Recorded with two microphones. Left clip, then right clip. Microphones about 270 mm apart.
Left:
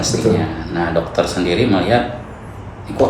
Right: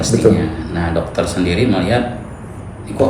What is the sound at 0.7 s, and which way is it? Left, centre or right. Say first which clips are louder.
A man's voice: left 4 dB; left.